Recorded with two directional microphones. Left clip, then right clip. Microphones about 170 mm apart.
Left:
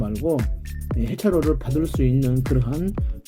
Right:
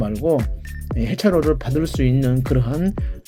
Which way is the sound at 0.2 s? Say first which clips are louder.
Right 4 dB; 25° right (ahead or behind).